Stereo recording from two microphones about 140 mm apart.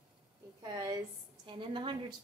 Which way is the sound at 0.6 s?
25° right (ahead or behind).